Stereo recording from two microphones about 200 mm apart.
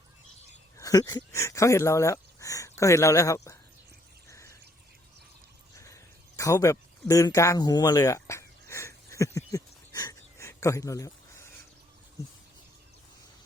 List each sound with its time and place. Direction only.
0.8 s speech: 15° left (ahead or behind)
5.7 s a sound: 15° left (ahead or behind)
12.2 s bird: 15° left (ahead or behind)